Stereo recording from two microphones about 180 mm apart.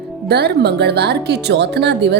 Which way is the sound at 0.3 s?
65° right (ahead or behind).